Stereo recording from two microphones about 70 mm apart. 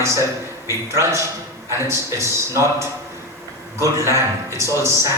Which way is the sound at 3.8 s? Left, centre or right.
Right.